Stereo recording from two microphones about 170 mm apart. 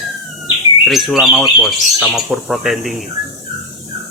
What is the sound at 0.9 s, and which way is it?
Speech, centre (ahead or behind).